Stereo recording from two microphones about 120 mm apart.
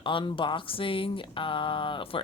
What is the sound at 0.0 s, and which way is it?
Speech, 45° left (ahead or behind).